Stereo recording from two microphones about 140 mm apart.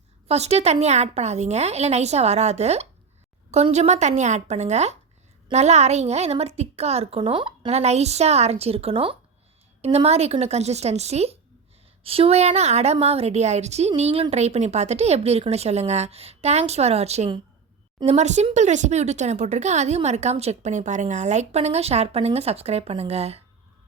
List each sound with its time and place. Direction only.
0.3 s a woman's voice: 50° right (ahead or behind)
7.2 s speech: 35° right (ahead or behind)
7.7 s a woman's voice: 50° right (ahead or behind)